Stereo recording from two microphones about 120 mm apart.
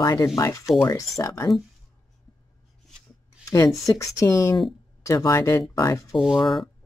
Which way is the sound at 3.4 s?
30° left (ahead or behind).